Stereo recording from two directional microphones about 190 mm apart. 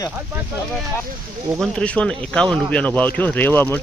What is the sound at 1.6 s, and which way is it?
Speech, 5° left (ahead or behind).